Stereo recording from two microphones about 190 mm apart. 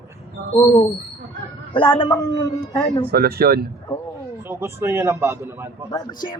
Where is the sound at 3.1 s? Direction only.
55° right (ahead or behind).